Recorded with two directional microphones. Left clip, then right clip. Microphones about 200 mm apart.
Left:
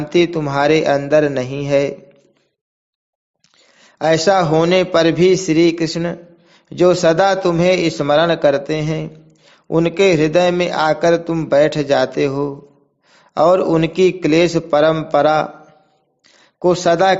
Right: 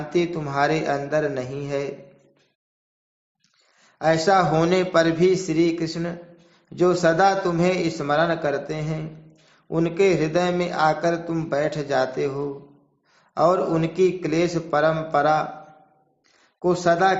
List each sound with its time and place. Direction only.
0.1 s a man's voice: 40° left (ahead or behind)
3.8 s a man's voice: 40° left (ahead or behind)